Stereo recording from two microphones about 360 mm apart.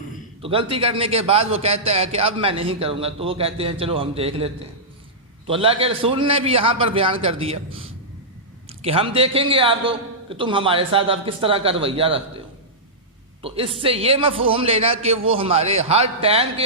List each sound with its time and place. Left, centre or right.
0.4 s a man's voice: centre
13.4 s a man's voice: centre